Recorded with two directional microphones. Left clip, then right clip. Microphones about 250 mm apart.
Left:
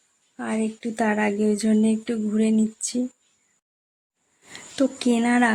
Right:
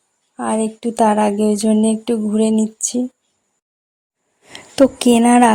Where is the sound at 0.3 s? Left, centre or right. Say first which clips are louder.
Right 8 dB; right.